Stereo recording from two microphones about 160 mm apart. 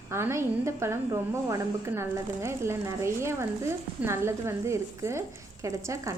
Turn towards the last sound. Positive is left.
turn(degrees=-20)  # may be behind; listen again after turning